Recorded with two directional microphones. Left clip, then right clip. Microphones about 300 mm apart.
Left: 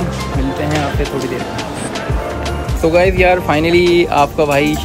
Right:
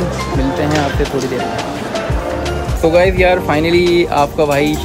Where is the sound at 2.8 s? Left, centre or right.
Centre.